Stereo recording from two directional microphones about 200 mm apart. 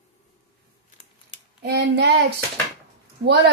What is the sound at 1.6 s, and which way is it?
Child singing, 55° right (ahead or behind).